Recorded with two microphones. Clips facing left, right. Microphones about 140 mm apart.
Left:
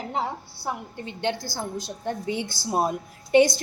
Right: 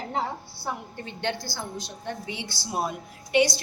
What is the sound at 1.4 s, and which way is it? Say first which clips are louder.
A woman's voice: left 3 dB; 45° left (ahead or behind).